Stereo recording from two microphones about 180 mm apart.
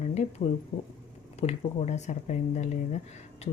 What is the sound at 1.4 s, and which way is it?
Speech, 35° left (ahead or behind).